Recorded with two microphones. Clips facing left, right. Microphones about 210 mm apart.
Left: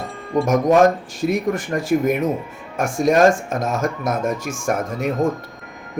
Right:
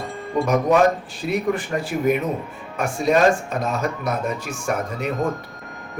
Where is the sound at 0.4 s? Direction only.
45° left (ahead or behind).